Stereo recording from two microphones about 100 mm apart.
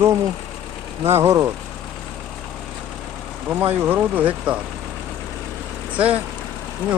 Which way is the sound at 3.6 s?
20° right (ahead or behind).